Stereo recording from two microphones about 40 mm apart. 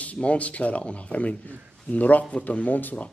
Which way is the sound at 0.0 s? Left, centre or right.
Left.